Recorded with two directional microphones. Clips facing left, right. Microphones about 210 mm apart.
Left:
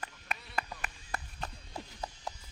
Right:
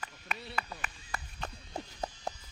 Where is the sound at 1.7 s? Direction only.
35° right (ahead or behind).